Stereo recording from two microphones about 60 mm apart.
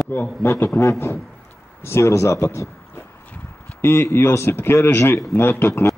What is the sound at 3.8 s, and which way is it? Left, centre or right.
A man's voice, left.